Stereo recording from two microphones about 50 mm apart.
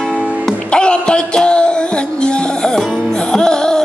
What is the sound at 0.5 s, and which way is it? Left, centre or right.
Music, centre.